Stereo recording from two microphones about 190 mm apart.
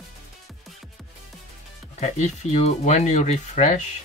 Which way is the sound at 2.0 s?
35° left (ahead or behind).